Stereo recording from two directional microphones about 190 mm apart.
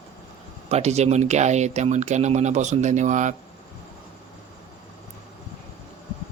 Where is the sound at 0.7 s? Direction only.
35° right (ahead or behind).